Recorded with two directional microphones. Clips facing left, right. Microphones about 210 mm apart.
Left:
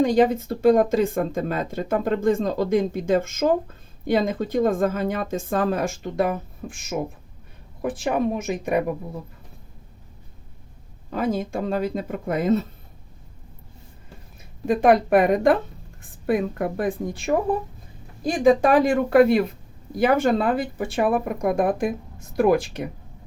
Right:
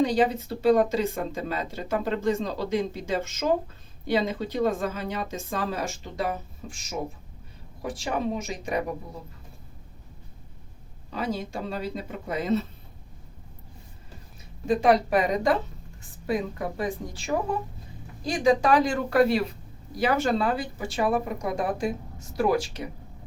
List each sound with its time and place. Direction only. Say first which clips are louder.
0.0 s a woman's voice: left 5 dB; 50° left (ahead or behind)
11.1 s speech: left 6 dB; 50° left (ahead or behind)
14.7 s a woman's voice: left 4 dB; 55° left (ahead or behind)